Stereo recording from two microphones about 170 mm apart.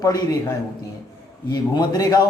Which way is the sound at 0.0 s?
20° left (ahead or behind).